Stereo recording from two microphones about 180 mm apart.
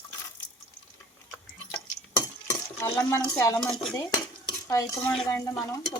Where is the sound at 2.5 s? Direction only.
15° left (ahead or behind).